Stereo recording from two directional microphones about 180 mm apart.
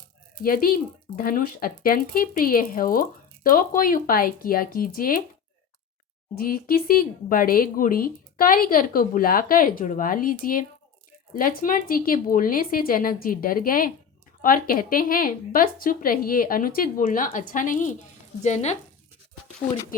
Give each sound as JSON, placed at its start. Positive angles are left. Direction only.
{"t": 0.4, "sound": "speech", "side_deg": 55}
{"t": 6.3, "sound": "speech", "side_deg": 55}